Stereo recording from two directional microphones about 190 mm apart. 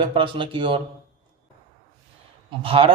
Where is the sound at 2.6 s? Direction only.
30° right (ahead or behind).